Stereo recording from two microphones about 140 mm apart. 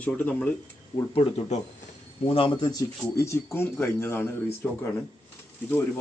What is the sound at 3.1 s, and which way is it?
Speech, 20° left (ahead or behind).